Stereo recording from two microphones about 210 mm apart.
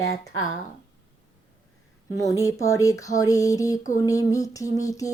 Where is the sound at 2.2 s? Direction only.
15° left (ahead or behind).